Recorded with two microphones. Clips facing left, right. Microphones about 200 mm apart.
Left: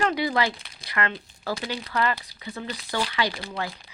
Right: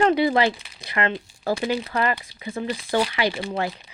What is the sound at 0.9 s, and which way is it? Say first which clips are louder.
Crumpling: right 4 dB; 25° right (ahead or behind).